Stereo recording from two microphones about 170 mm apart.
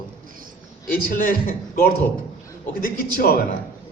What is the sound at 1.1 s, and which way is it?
Speech, 55° left (ahead or behind).